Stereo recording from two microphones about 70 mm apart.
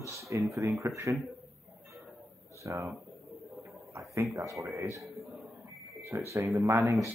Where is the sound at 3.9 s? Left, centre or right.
Right.